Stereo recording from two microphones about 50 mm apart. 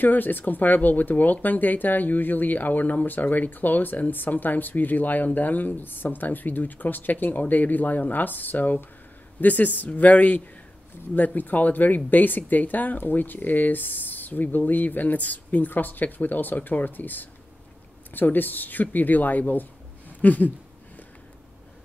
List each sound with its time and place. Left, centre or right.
0.0 s speech: left